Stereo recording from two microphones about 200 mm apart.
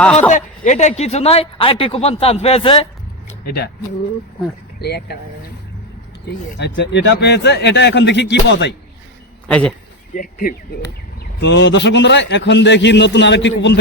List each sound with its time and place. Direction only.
0.0 s a man's voice: 5° left (ahead or behind)
0.3 s speech: 40° left (ahead or behind)
3.4 s speech: 50° left (ahead or behind)
4.8 s a man's voice: 55° left (ahead or behind)
6.6 s a man's voice: 65° left (ahead or behind)
9.5 s a man's voice: 5° left (ahead or behind)
10.2 s speech: 45° left (ahead or behind)
11.3 s a man's voice: 65° left (ahead or behind)